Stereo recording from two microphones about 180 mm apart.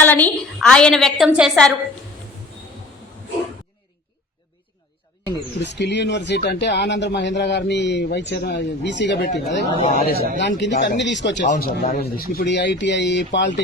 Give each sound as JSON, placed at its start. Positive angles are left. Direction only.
{"t": 0.0, "sound": "a woman's voice", "side_deg": 10}
{"t": 5.6, "sound": "speech", "side_deg": 75}
{"t": 10.0, "sound": "speech", "side_deg": 55}
{"t": 10.6, "sound": "speech", "side_deg": 75}
{"t": 11.4, "sound": "speech", "side_deg": 50}